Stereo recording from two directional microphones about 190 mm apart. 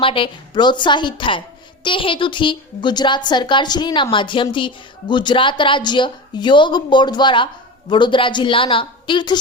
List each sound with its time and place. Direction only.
0.0 s a woman's voice: 25° left (ahead or behind)